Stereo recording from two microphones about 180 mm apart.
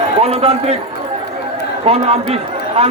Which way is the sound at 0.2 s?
35° right (ahead or behind).